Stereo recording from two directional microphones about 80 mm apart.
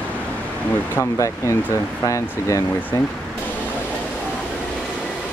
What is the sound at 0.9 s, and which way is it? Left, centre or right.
Speech, left.